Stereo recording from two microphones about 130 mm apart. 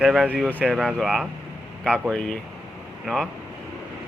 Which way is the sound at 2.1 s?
10° left (ahead or behind).